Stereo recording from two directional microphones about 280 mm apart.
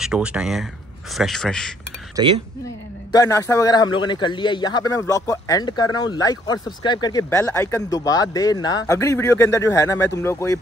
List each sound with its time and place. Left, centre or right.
0.0 s speech: centre
3.1 s speech: centre